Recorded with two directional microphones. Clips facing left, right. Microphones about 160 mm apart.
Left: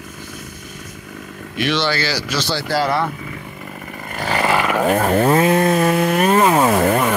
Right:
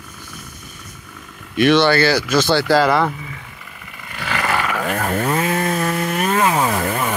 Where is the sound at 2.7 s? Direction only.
90° right.